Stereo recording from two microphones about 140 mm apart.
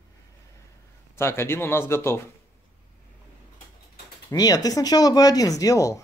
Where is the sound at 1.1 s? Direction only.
15° left (ahead or behind).